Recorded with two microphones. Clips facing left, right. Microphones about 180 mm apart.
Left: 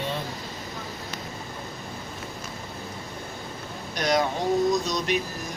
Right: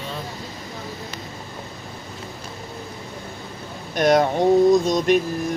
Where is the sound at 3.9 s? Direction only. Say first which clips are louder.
Right 7 dB; 55° right (ahead or behind).